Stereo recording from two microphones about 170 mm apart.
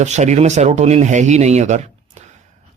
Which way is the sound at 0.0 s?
45° right (ahead or behind).